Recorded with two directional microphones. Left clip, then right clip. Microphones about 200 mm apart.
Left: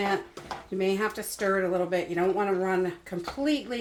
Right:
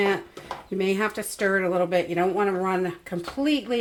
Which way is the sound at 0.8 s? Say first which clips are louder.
Right 3 dB; 50° right (ahead or behind).